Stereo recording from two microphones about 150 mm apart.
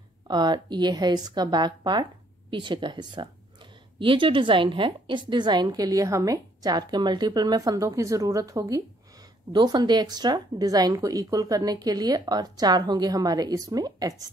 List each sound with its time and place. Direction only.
0.3 s a woman's voice: 30° right (ahead or behind)